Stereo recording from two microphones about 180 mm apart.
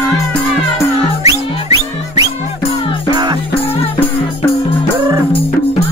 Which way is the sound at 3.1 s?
20° right (ahead or behind).